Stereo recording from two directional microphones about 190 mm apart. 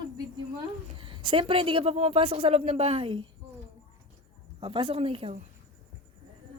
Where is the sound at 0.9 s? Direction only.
25° right (ahead or behind).